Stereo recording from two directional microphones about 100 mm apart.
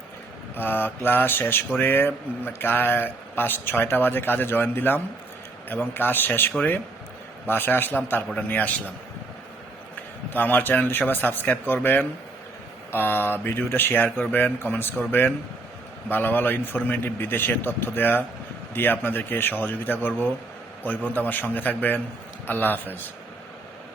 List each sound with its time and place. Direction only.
0.5 s a man's voice: 20° left (ahead or behind)
10.3 s a man's voice: 20° left (ahead or behind)